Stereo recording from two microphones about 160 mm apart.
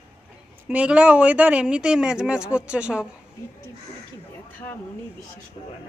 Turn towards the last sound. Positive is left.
turn(degrees=35)  # may be behind; listen again after turning